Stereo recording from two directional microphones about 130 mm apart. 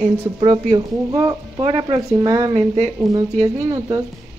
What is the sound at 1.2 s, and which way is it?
Speech, 50° right (ahead or behind).